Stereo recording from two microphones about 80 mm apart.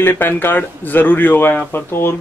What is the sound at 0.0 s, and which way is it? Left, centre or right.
Speech, left.